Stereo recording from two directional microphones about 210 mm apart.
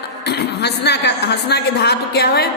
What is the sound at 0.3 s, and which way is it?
A woman's voice, 50° left (ahead or behind).